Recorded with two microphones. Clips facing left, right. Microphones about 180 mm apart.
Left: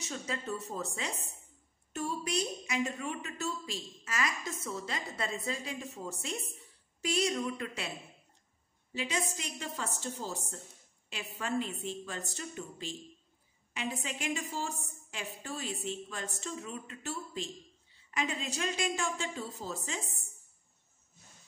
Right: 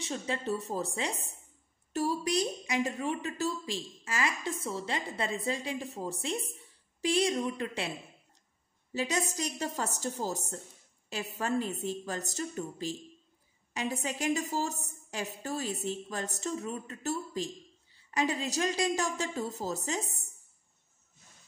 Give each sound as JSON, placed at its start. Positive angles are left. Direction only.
{"t": 0.0, "sound": "a woman's voice", "side_deg": -30}
{"t": 8.9, "sound": "a woman's voice", "side_deg": -40}